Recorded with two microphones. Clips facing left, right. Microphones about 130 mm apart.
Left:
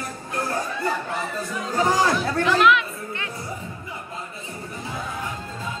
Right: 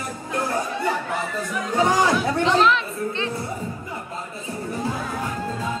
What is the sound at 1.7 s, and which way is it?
Chatter, 20° right (ahead or behind).